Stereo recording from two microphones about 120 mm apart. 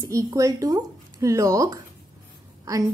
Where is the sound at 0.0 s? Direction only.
25° right (ahead or behind).